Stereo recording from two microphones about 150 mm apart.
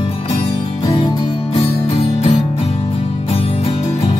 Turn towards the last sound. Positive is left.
turn(degrees=40)  # may be behind; listen again after turning